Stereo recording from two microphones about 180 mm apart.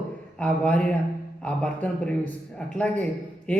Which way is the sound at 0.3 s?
5° left (ahead or behind).